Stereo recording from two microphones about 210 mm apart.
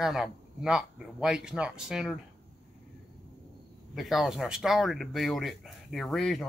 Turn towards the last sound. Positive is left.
turn(degrees=0)  # may be behind; listen again after turning